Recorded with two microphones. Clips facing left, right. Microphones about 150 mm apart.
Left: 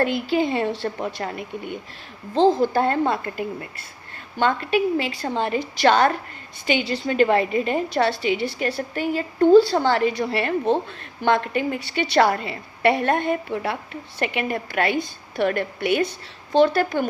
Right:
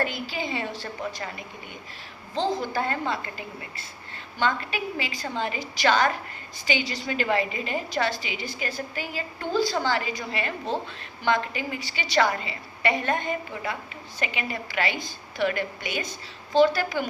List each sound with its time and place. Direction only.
0.0 s a woman's voice: 55° left (ahead or behind)